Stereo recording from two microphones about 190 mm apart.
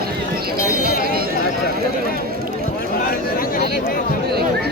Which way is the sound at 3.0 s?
50° left (ahead or behind).